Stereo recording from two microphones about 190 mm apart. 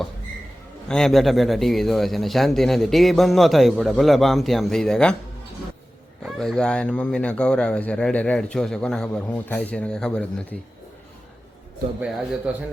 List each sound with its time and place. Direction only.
0.9 s speech: 5° left (ahead or behind)
6.2 s speech: 5° left (ahead or behind)
12.5 s a man's voice: 5° right (ahead or behind)